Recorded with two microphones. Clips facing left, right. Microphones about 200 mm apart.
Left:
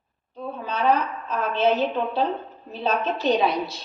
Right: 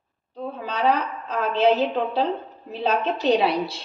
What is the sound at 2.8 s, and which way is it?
Speech, 35° right (ahead or behind).